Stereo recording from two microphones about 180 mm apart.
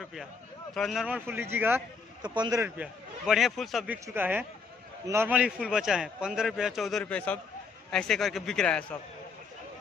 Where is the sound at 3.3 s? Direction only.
Centre (ahead or behind).